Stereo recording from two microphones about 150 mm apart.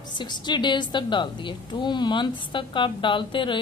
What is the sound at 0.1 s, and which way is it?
A woman's voice, 30° left (ahead or behind).